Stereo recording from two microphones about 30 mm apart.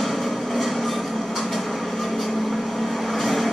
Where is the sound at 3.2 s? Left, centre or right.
Centre.